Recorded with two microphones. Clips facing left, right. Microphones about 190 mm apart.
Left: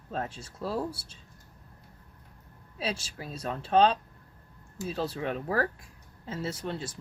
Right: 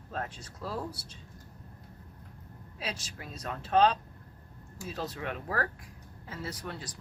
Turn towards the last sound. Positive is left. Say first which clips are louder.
# left 5 dB
turn(degrees=25)  # may be behind; listen again after turning